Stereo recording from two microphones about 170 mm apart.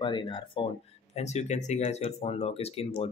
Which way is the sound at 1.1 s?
40° left (ahead or behind).